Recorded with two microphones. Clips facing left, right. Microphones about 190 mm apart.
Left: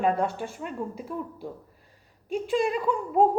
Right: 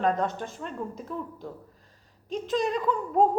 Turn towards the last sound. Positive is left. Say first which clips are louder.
# left 1 dB
turn(degrees=5)  # may be behind; listen again after turning